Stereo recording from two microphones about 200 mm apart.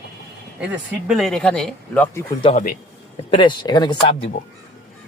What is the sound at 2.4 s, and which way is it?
Speech, 30° left (ahead or behind).